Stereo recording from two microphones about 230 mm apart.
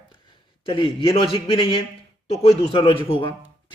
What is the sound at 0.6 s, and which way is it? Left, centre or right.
A man's voice, left.